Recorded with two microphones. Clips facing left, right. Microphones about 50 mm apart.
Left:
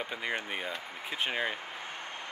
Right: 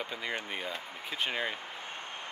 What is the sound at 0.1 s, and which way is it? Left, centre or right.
Speech, centre.